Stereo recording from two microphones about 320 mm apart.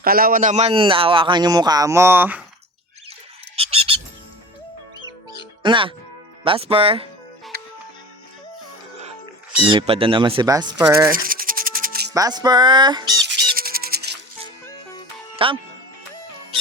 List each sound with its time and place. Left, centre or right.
0.0 s a man's voice: right; by 2.4 s centre
3.5 s frog: centre
5.6 s a man's voice: centre
9.6 s a man's voice: centre
11.1 s rub: right
12.1 s a man's voice: centre
13.2 s music: right
15.4 s a man's voice: centre